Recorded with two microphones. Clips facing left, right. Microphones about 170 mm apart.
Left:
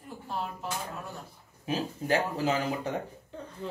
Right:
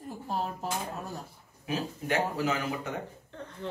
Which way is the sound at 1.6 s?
30° left (ahead or behind).